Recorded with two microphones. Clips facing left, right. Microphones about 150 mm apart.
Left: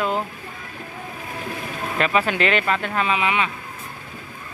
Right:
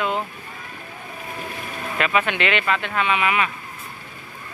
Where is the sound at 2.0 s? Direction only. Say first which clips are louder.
Left 1 dB; 35° left (ahead or behind).